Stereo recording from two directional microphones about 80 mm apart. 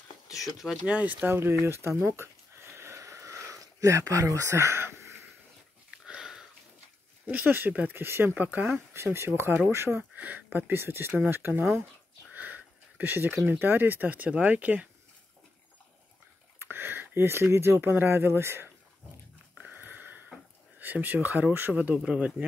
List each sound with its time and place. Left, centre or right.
0.8 s speech: centre
1.2 s a sound: right
5.9 s sniff: centre
7.2 s speech: right
8.7 s speech: right
12.3 s sniff: right
13.5 s speech: right
16.5 s speech: right
19.5 s a sound: centre
20.8 s speech: right